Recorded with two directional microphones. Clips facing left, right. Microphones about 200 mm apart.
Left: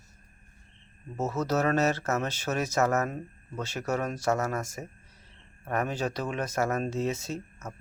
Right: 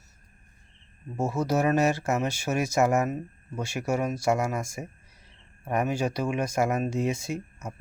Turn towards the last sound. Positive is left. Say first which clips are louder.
# right 3 dB
turn(degrees=-10)  # may be behind; listen again after turning